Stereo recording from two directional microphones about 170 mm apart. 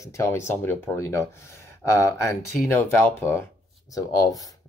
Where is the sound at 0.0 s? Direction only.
15° left (ahead or behind).